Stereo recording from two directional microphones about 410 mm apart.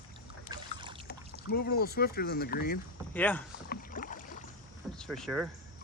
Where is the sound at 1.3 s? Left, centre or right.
Left.